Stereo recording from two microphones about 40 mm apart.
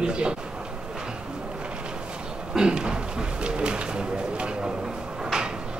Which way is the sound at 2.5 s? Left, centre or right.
Right.